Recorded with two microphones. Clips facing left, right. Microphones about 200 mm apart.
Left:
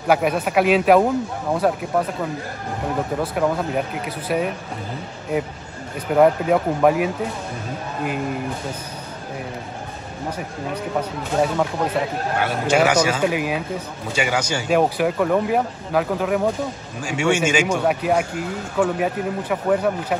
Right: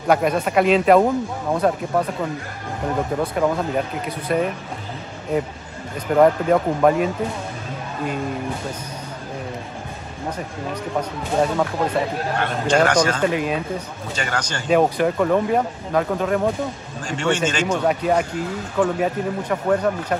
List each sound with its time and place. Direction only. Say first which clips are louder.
0.1 s speech: even; 5° left (ahead or behind)
3.2 s speech: even; centre (ahead or behind)
6.1 s speech: even; 5° left (ahead or behind)
10.7 s speech: left 1 dB; 5° left (ahead or behind)